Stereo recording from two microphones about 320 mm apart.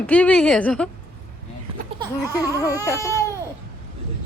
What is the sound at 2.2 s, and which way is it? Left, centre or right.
Baby cry, centre.